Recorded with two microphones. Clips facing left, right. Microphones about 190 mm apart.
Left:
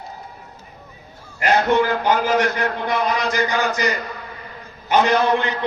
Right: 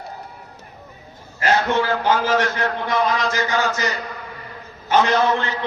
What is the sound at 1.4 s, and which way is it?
A man's voice, 15° left (ahead or behind).